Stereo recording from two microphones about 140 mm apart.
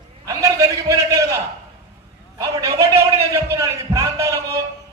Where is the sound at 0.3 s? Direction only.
25° right (ahead or behind).